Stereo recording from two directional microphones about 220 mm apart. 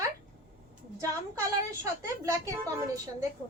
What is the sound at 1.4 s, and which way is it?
A woman's voice, 15° right (ahead or behind).